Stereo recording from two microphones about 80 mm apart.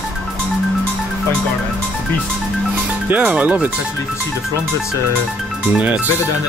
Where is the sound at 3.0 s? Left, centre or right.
Centre.